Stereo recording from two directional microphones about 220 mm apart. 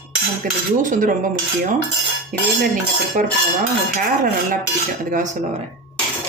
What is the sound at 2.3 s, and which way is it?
Speech, 35° right (ahead or behind).